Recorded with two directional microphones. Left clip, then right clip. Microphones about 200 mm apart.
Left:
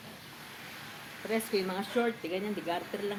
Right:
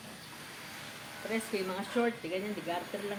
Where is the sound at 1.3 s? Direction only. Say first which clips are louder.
Left 3 dB; 45° left (ahead or behind).